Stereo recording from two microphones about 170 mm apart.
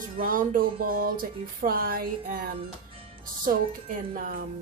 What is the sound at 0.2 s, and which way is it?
Speech, 55° right (ahead or behind).